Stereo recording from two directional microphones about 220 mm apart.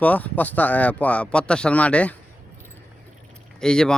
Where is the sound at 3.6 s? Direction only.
5° left (ahead or behind).